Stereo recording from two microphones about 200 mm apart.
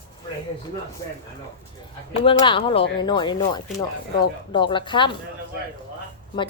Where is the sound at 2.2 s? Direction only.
25° left (ahead or behind).